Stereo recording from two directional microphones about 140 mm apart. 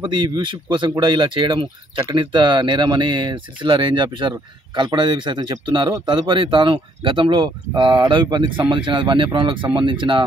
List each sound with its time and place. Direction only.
0.0 s speech: 35° right (ahead or behind)